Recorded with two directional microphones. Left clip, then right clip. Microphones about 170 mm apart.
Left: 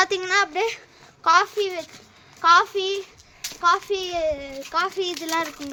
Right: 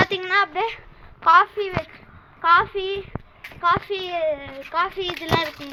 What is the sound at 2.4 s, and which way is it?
A child's voice, 90° left.